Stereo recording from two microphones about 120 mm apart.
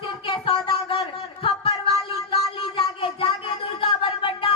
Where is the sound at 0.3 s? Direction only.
45° left (ahead or behind).